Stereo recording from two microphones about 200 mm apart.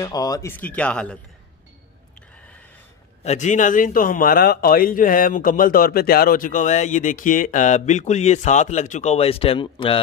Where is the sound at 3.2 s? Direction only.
35° left (ahead or behind).